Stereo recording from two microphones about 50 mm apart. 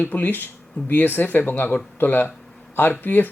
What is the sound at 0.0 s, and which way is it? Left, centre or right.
Speech, left.